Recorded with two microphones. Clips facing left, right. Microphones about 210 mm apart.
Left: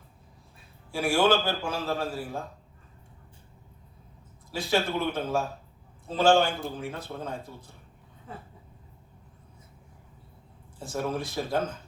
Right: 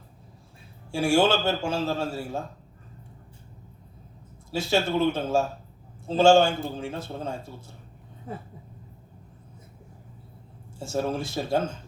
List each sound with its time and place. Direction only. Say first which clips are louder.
0.9 s a man's voice: right 2 dB; 25° right (ahead or behind)
4.5 s a man's voice: right 3 dB; 25° right (ahead or behind)
10.8 s a man's voice: right 3 dB; 25° right (ahead or behind)